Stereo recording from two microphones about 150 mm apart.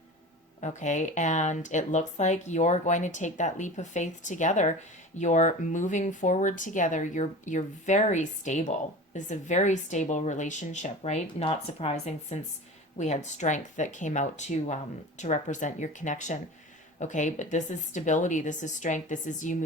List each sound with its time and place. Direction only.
0.6 s speech: 55° left (ahead or behind)